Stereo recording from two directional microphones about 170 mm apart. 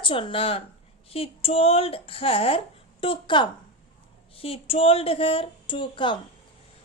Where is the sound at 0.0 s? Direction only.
30° left (ahead or behind).